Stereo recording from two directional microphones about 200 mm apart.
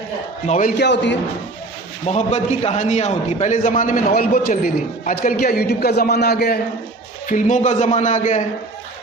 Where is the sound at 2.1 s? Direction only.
35° left (ahead or behind); by 6.6 s 50° left (ahead or behind).